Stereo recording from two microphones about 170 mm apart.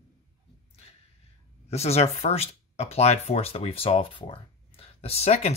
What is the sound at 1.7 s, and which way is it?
Speech, 35° left (ahead or behind).